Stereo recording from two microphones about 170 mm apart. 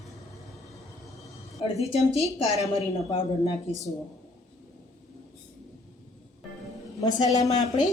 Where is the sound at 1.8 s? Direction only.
40° left (ahead or behind).